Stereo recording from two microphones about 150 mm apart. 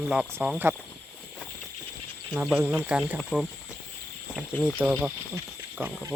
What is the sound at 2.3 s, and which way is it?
Speech, 5° right (ahead or behind).